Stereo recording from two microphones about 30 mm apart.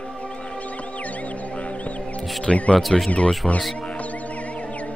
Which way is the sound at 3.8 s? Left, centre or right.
Left.